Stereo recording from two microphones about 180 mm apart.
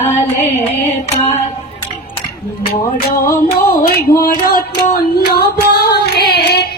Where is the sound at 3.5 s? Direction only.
60° left (ahead or behind).